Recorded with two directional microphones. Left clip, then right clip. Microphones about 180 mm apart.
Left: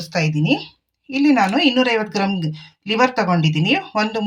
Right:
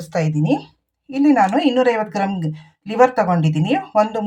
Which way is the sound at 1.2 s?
35° right (ahead or behind).